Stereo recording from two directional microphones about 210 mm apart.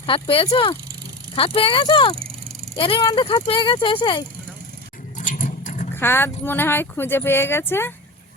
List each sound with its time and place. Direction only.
0.0 s speech: 25° left (ahead or behind)
5.1 s rodents: 35° left (ahead or behind)
5.9 s speech: 10° left (ahead or behind)